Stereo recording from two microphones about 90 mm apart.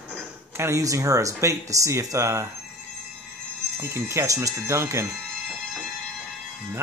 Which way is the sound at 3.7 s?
30° right (ahead or behind).